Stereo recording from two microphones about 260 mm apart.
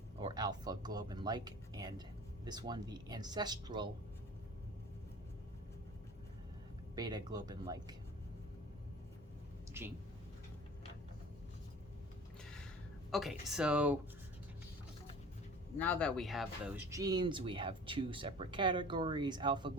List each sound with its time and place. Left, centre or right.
0.2 s speech: centre
6.9 s speech: centre
9.7 s a woman's voice: centre
13.1 s speech: centre
15.8 s speech: centre
16.9 s speech: centre